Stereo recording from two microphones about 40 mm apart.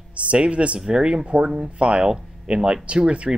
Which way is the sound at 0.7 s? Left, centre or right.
Right.